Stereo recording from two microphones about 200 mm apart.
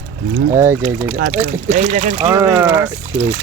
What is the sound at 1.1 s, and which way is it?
Speech, 45° right (ahead or behind).